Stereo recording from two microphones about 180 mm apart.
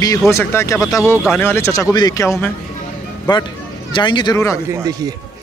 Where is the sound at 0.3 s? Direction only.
15° left (ahead or behind).